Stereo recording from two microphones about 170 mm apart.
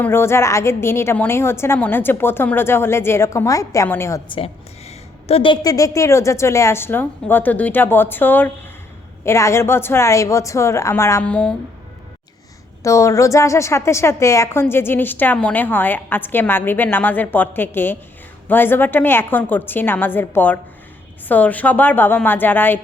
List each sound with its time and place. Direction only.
0.0 s a woman's voice: 15° left (ahead or behind)
4.3 s a woman's voice: 35° left (ahead or behind); by 11.5 s 5° left (ahead or behind)
12.8 s a woman's voice: 20° left (ahead or behind)